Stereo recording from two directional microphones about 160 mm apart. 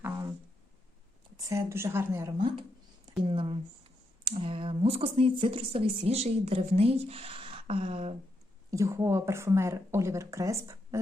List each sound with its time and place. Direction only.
1.5 s speech: 20° right (ahead or behind)
3.2 s speech: 35° right (ahead or behind)
8.7 s speech: 20° right (ahead or behind)